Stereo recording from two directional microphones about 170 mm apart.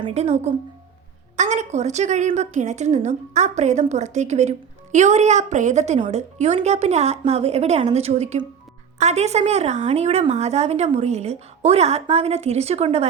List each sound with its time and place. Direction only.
0.0 s a woman's voice: 40° right (ahead or behind)